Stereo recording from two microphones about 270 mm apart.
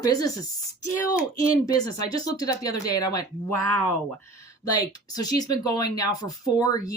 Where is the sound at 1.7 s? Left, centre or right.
Centre.